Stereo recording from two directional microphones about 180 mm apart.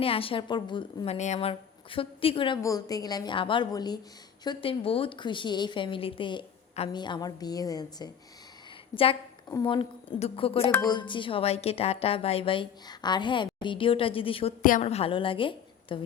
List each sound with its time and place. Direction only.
0.0 s a woman's voice: 30° left (ahead or behind)
2.6 s a woman's voice: 20° left (ahead or behind)
14.6 s a woman's voice: 50° left (ahead or behind)
14.8 s a woman's voice: 35° left (ahead or behind)